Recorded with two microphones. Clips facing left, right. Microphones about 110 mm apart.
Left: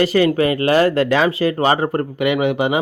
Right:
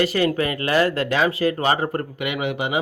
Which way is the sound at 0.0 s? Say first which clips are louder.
Left 5 dB; 25° left (ahead or behind).